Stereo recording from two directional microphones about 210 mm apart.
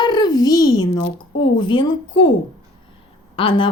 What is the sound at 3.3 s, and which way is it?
Speech, 25° left (ahead or behind).